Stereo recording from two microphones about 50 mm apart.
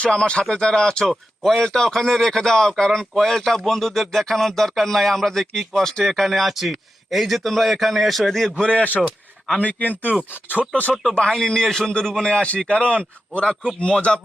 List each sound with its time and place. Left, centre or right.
0.0 s a man's voice: centre
8.6 s a man's voice: left
11.0 s a man's voice: centre